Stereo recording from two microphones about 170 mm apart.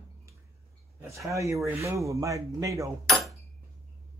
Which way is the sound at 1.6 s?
15° right (ahead or behind).